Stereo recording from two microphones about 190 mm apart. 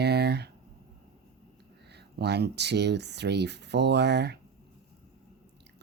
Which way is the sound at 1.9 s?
60° right (ahead or behind).